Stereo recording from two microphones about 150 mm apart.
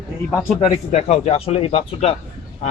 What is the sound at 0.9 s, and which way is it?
Speech, 45° left (ahead or behind).